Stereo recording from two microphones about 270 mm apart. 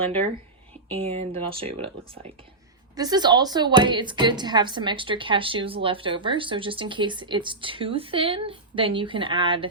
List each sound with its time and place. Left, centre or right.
0.9 s a woman's voice: right